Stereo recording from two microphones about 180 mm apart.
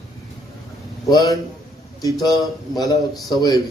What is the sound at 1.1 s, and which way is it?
Speech, 20° left (ahead or behind).